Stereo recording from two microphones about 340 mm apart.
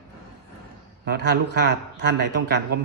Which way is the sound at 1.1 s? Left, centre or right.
Right.